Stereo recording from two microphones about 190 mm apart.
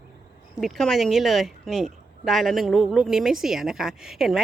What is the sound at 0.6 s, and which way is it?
A woman's voice, centre (ahead or behind).